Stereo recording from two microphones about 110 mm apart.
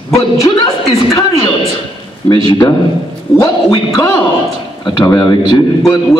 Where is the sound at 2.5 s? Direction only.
45° left (ahead or behind).